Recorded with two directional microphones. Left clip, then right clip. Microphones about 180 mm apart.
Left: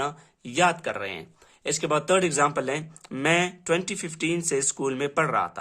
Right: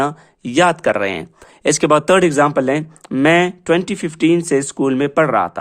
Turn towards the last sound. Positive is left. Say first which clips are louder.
# right 10 dB
turn(degrees=-35)  # may be behind; listen again after turning